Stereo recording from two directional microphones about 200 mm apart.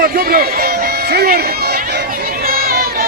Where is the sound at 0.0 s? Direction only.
50° right (ahead or behind).